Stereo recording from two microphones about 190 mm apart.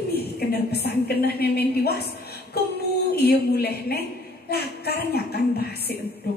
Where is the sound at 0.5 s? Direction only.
55° left (ahead or behind).